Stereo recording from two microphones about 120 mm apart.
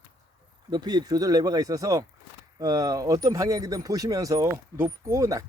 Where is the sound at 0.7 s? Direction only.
35° right (ahead or behind).